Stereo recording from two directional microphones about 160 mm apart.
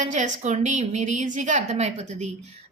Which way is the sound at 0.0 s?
50° right (ahead or behind).